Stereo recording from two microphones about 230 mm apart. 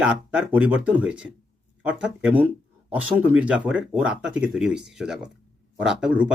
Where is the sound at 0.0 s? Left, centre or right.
Centre.